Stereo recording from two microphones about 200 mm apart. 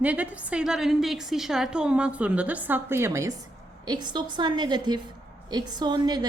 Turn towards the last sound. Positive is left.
turn(degrees=-20)  # may be behind; listen again after turning